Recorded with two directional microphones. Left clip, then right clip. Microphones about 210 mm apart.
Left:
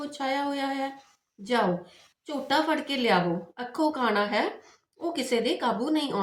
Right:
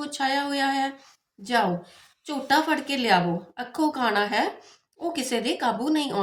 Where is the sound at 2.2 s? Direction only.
45° right (ahead or behind).